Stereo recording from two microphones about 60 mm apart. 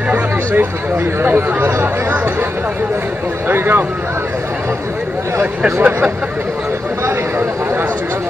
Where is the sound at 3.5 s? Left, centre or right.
Right.